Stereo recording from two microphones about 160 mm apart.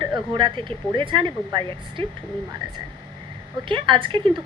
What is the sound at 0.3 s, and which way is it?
Speech, 30° right (ahead or behind).